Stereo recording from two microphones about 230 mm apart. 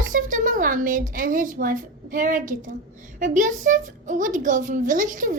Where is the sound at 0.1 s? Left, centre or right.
Right.